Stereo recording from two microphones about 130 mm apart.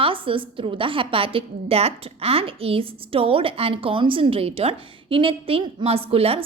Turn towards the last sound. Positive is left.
turn(degrees=-50)  # may be behind; listen again after turning